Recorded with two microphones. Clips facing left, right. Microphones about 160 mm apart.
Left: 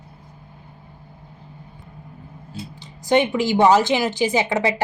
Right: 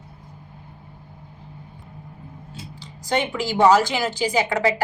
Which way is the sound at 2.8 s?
20° left (ahead or behind).